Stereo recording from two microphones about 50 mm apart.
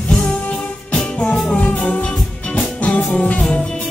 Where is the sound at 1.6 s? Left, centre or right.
Left.